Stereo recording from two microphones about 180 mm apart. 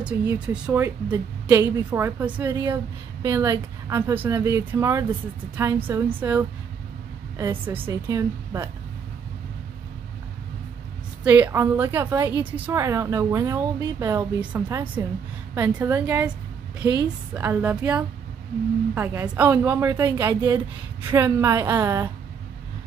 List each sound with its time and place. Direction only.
0.0 s a woman's voice: 5° right (ahead or behind)
2.5 s a woman's voice: 20° right (ahead or behind)
11.2 s a woman's voice: 10° right (ahead or behind)